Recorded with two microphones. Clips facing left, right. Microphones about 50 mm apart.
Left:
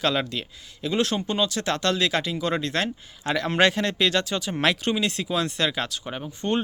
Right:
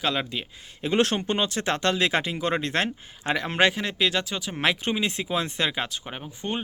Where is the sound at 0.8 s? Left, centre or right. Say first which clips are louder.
Right 1 dB; right.